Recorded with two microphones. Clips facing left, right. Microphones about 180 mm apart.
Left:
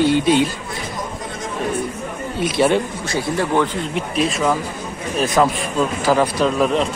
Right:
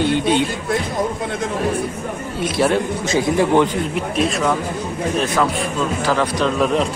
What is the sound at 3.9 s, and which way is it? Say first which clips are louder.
Speech: right 1 dB; centre (ahead or behind).